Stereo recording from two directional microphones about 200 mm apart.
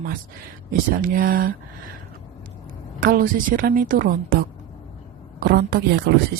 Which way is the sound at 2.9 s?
45° right (ahead or behind).